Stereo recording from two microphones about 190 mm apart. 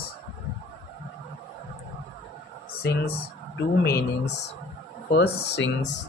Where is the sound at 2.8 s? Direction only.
55° left (ahead or behind).